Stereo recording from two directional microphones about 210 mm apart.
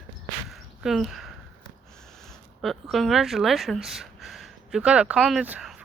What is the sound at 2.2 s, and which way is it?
Speech, centre (ahead or behind).